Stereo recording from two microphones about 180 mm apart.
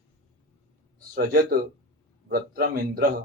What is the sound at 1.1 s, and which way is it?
A man's voice, 60° right (ahead or behind).